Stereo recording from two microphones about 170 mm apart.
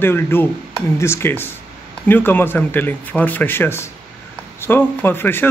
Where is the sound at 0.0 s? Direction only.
15° left (ahead or behind).